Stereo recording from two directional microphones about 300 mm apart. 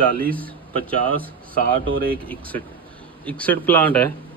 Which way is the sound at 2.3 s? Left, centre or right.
Centre.